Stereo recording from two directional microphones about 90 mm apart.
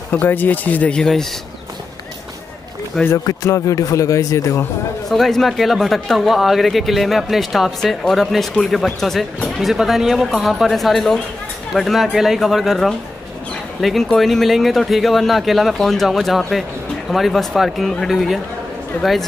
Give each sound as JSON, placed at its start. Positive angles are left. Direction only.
{"t": 0.1, "sound": "speech", "side_deg": 20}
{"t": 2.9, "sound": "speech", "side_deg": 5}
{"t": 3.3, "sound": "speech", "side_deg": 35}
{"t": 5.1, "sound": "speech", "side_deg": 0}